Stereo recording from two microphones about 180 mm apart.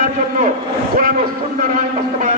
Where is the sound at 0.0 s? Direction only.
45° right (ahead or behind).